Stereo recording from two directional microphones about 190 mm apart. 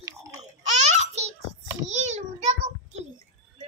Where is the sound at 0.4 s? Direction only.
35° right (ahead or behind).